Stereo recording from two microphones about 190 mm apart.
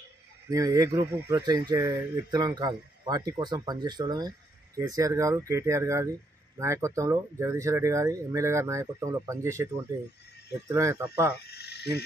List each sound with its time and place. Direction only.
0.5 s speech: 15° right (ahead or behind)
11.4 s frog: 60° left (ahead or behind)